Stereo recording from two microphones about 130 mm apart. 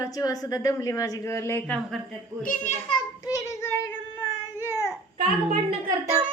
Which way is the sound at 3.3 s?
20° left (ahead or behind).